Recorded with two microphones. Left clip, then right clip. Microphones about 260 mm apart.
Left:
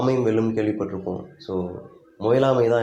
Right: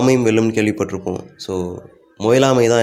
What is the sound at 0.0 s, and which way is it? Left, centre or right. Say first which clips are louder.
Speech: right 6 dB; right.